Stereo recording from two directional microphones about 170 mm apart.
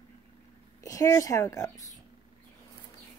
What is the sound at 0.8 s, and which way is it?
A woman's voice, 20° left (ahead or behind).